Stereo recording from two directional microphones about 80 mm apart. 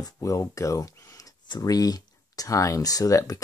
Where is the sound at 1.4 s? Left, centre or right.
Left.